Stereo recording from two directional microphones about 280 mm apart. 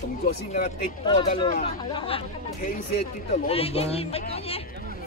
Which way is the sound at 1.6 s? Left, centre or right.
Centre.